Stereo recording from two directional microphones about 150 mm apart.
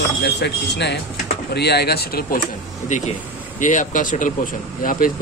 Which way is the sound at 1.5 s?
90° left.